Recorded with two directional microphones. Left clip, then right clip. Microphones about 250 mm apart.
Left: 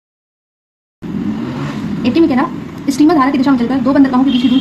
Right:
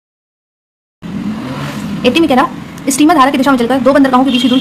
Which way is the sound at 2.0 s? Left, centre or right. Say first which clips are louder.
Right 3 dB; right.